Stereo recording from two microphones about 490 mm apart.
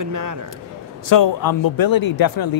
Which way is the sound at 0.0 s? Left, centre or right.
Right.